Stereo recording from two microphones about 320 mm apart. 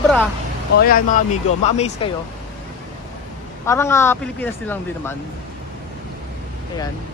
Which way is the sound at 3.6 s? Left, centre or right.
Centre.